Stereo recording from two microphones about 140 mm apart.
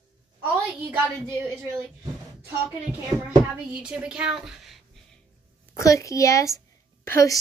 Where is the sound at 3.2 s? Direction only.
10° right (ahead or behind).